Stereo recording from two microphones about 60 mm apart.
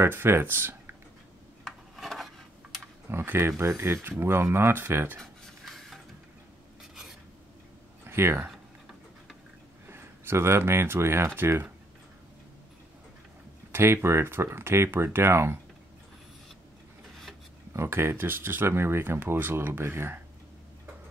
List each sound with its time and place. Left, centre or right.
0.0 s speech: right
1.7 s a sound: centre
3.1 s speech: right
5.2 s a sound: centre
8.0 s speech: right
9.8 s speech: right
13.7 s speech: right
17.7 s speech: right